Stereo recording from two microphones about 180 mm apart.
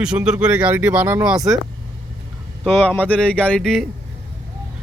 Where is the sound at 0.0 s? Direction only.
5° right (ahead or behind).